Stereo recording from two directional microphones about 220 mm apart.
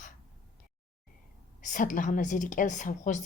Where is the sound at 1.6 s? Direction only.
35° left (ahead or behind).